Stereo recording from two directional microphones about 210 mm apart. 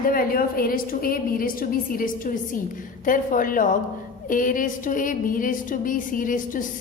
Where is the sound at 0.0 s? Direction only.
45° left (ahead or behind).